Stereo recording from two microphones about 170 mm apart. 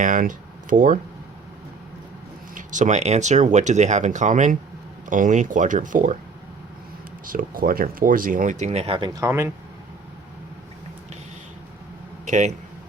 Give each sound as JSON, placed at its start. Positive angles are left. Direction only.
{"t": 0.0, "sound": "speech", "side_deg": -50}
{"t": 2.6, "sound": "speech", "side_deg": -50}
{"t": 7.3, "sound": "speech", "side_deg": -55}
{"t": 12.2, "sound": "a sound", "side_deg": -50}